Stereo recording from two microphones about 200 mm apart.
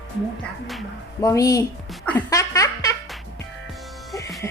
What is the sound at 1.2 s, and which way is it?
Speech, 15° left (ahead or behind).